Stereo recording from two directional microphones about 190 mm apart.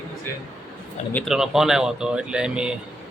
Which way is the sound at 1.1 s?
Centre (ahead or behind).